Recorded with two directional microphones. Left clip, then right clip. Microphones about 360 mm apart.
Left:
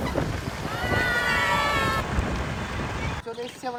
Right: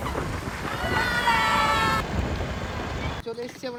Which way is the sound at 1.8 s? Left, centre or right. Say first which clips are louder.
Right 2 dB; centre.